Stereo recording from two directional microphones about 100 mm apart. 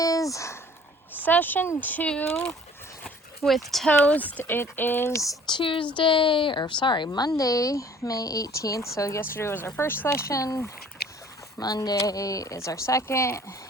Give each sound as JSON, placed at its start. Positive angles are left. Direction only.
{"t": 0.0, "sound": "a sound", "side_deg": 35}
{"t": 1.2, "sound": "speech", "side_deg": 20}
{"t": 3.4, "sound": "speech", "side_deg": 0}
{"t": 3.8, "sound": "speech", "side_deg": 15}
{"t": 5.5, "sound": "speech", "side_deg": 55}